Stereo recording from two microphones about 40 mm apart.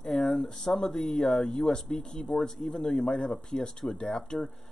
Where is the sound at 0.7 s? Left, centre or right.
Centre.